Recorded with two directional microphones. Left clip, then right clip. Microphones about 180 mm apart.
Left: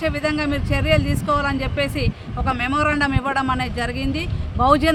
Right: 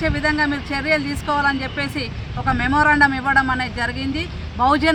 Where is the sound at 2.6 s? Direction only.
30° left (ahead or behind).